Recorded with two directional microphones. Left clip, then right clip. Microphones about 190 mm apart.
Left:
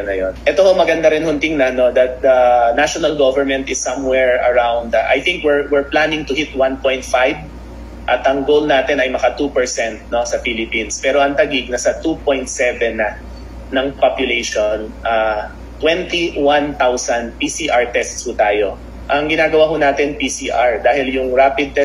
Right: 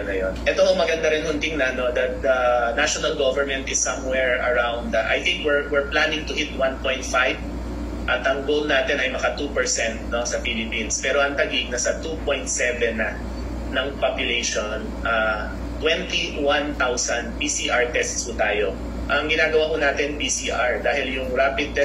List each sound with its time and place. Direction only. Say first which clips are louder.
0.1 s a man's voice: left 6 dB; 25° left (ahead or behind)